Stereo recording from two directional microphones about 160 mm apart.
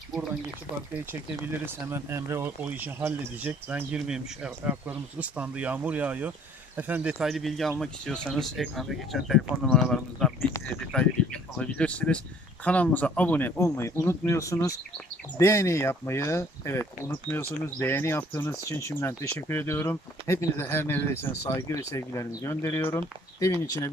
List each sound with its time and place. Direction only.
0.9 s speech: 10° right (ahead or behind); by 23.9 s 20° left (ahead or behind)